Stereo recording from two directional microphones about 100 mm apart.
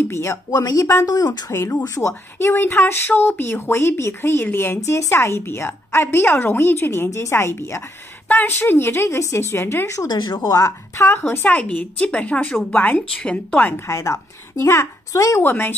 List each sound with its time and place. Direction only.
0.1 s a woman's voice: 30° left (ahead or behind); by 1.4 s 45° left (ahead or behind)
1.5 s speech: 30° left (ahead or behind)
13.8 s a woman's voice: 30° left (ahead or behind)